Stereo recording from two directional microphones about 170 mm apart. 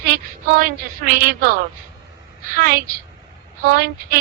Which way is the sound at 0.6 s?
60° right (ahead or behind).